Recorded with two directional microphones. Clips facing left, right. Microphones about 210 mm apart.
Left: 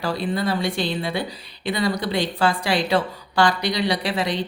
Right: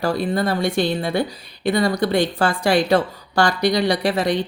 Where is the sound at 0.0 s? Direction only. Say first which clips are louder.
Right 3 dB; 45° right (ahead or behind).